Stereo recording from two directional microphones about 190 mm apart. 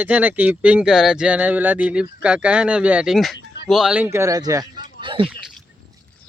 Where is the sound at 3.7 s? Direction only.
5° right (ahead or behind).